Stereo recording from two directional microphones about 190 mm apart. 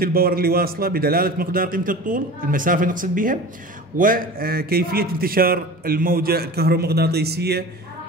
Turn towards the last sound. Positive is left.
turn(degrees=-60)  # may be behind; listen again after turning